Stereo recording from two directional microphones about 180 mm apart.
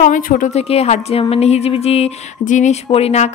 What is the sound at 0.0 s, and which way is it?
A woman's voice, 45° left (ahead or behind).